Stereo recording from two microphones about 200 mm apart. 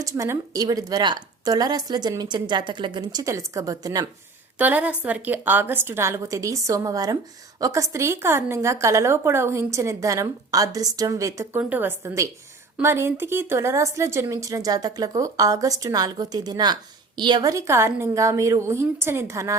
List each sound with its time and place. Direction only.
0.0 s a woman's voice: 15° right (ahead or behind)
4.5 s a woman's voice: 5° right (ahead or behind)